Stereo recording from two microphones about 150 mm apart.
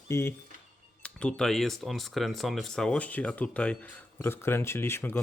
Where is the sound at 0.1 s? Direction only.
15° left (ahead or behind).